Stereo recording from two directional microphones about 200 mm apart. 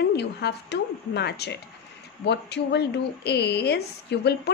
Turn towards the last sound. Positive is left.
turn(degrees=55)  # may be behind; listen again after turning